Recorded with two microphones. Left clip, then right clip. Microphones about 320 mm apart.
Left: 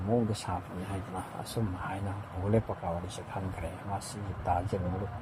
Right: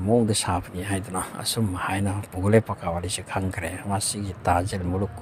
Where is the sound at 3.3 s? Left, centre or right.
Right.